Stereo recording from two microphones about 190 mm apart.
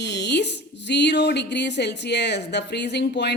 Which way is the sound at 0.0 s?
65° left (ahead or behind).